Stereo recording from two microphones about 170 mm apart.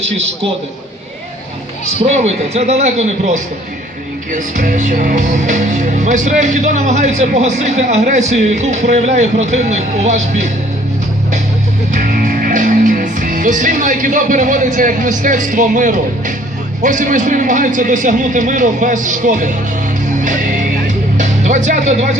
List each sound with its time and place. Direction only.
2.0 s a man's voice: 40° right (ahead or behind)
4.3 s music: 45° right (ahead or behind)
11.9 s music: 50° right (ahead or behind)